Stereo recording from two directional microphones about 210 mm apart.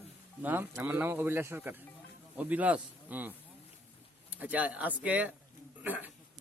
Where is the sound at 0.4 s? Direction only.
10° right (ahead or behind).